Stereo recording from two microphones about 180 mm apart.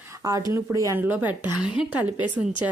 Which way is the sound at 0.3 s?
20° right (ahead or behind).